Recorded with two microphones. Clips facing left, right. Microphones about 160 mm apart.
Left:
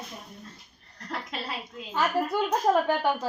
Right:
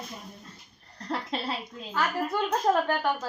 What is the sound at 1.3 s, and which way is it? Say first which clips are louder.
Speech: right 4 dB; 30° right (ahead or behind).